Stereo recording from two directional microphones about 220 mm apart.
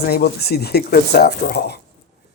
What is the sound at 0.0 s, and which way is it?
Speech, 45° left (ahead or behind).